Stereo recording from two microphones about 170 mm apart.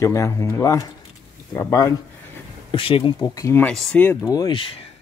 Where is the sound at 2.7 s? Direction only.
30° left (ahead or behind).